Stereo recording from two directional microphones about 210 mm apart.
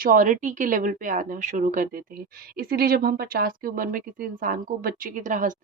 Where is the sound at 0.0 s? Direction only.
40° right (ahead or behind).